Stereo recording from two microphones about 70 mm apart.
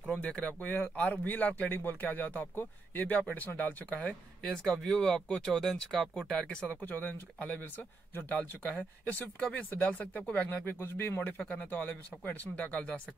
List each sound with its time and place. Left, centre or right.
0.1 s speech: centre
4.4 s speech: centre
6.2 s speech: centre